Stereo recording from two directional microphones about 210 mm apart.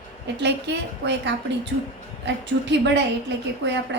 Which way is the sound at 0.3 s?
55° right (ahead or behind).